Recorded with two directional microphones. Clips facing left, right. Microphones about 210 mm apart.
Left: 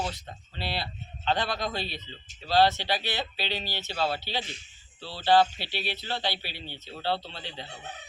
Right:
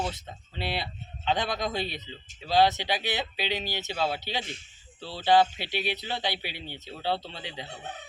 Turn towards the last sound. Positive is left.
turn(degrees=-15)  # may be behind; listen again after turning